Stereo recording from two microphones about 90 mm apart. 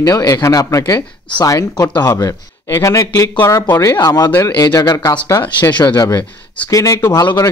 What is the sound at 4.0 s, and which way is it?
Speech, 45° left (ahead or behind).